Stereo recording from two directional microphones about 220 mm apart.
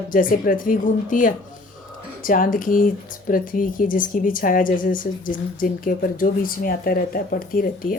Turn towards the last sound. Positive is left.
turn(degrees=40)  # may be behind; listen again after turning